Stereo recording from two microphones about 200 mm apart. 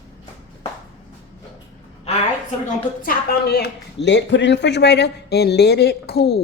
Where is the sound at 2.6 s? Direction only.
45° left (ahead or behind).